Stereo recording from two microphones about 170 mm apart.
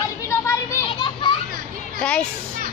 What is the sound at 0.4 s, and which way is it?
Children playing, 15° left (ahead or behind).